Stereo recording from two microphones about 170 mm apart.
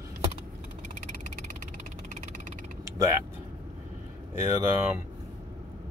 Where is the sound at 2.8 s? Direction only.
15° right (ahead or behind).